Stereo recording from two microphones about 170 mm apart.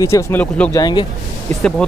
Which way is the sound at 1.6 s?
5° left (ahead or behind).